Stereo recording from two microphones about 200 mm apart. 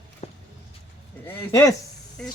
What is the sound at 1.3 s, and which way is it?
Speech, 15° left (ahead or behind).